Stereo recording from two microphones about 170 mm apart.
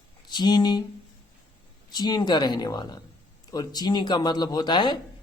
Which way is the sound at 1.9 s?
25° left (ahead or behind).